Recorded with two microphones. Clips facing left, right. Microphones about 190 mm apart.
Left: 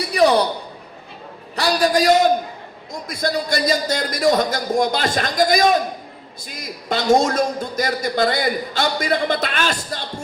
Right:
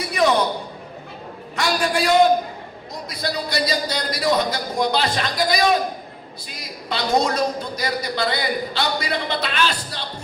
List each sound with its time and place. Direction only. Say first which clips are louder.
0.0 s a sound: left 3 dB; 35° left (ahead or behind)
1.5 s a man's voice: left 4 dB; 35° left (ahead or behind)
6.8 s a man's voice: left 4 dB; 45° left (ahead or behind)